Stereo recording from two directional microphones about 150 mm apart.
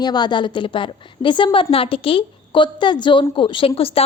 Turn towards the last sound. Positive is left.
turn(degrees=40)  # may be behind; listen again after turning